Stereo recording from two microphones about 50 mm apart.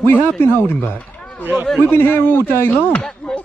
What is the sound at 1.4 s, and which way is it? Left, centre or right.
Speech, right.